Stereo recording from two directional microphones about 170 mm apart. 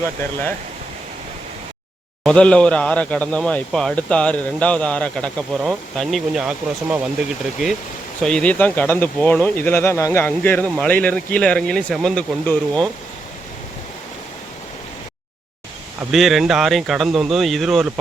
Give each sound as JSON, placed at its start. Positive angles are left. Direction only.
{"t": 2.2, "sound": "speech", "side_deg": 5}
{"t": 8.2, "sound": "speech", "side_deg": 5}
{"t": 16.1, "sound": "speech", "side_deg": 0}